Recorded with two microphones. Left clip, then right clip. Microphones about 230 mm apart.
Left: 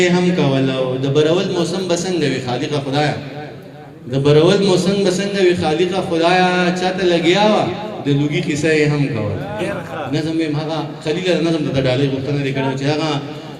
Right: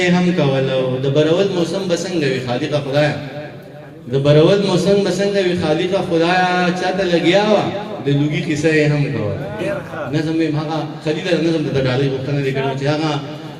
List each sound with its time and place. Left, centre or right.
0.0 s a man's voice: left
4.2 s a man's voice: left
10.7 s a man's voice: left